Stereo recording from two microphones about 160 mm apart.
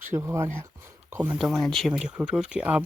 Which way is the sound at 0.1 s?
15° right (ahead or behind).